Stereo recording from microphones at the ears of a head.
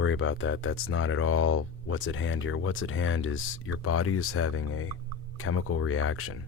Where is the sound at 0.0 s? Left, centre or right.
Left.